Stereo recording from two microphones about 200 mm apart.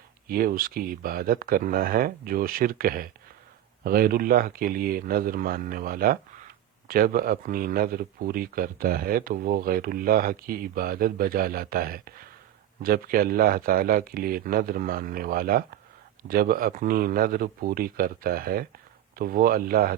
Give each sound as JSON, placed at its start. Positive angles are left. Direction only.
{"t": 0.3, "sound": "speech", "side_deg": -45}